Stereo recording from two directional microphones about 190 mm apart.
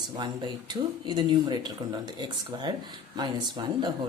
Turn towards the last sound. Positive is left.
turn(degrees=-25)  # may be behind; listen again after turning